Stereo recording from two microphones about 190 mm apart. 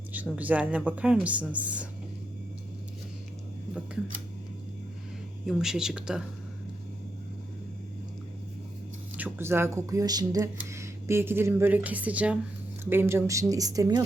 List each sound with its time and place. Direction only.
0.1 s speech: 10° right (ahead or behind)
5.5 s speech: centre (ahead or behind)
9.1 s speech: 10° right (ahead or behind)